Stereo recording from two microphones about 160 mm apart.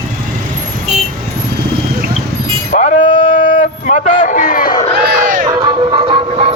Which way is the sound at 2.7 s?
50° left (ahead or behind).